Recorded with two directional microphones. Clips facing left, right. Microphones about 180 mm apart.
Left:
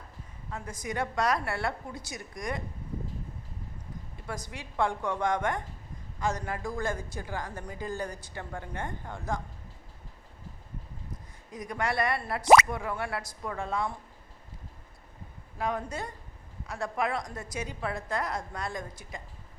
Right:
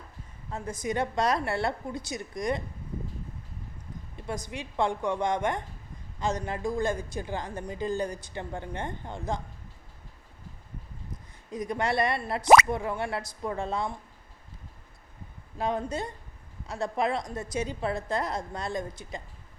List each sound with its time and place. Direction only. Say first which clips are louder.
0.5 s a woman's voice: right 4 dB; 25° right (ahead or behind)
4.4 s a woman's voice: right 1 dB; 20° right (ahead or behind)
11.5 s a woman's voice: right 3 dB; 25° right (ahead or behind)
15.5 s a woman's voice: right 3 dB; 25° right (ahead or behind)